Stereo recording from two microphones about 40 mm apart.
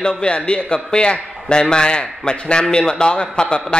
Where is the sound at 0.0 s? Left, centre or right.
Left.